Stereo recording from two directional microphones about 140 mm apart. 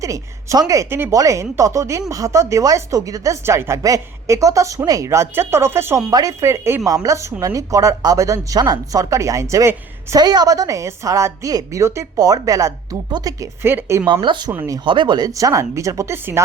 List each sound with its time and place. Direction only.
0.0 s a woman's voice: 25° right (ahead or behind)
14.1 s a woman's voice: 35° right (ahead or behind); by 16.4 s 15° right (ahead or behind)